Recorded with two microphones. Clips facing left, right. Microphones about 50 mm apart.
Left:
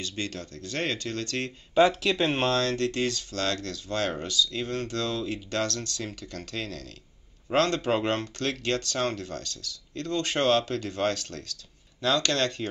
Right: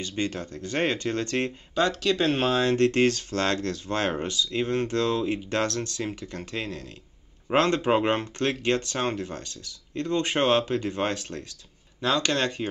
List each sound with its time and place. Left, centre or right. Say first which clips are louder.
0.0 s speech: right 4 dB; right
1.8 s speech: left 2 dB; centre
2.5 s speech: right 3 dB; right
2.8 s speech: right 6 dB; right; by 12.6 s centre